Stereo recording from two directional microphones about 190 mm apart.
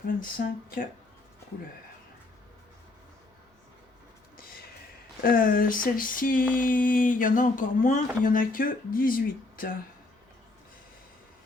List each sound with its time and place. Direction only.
0.2 s speech: 45° left (ahead or behind)
5.2 s speech: 45° left (ahead or behind)